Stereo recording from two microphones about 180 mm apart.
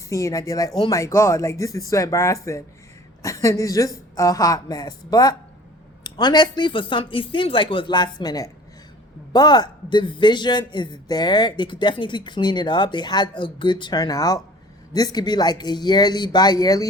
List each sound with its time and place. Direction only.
0.1 s a man's voice: 15° left (ahead or behind)